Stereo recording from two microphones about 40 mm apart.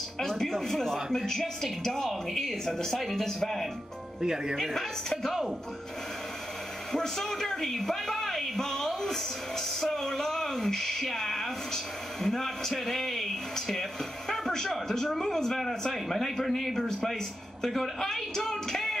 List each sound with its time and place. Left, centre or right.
0.2 s a woman's voice: centre
3.0 s speech: centre
4.2 s speech: centre
4.6 s a woman's voice: centre
6.9 s a woman's voice: centre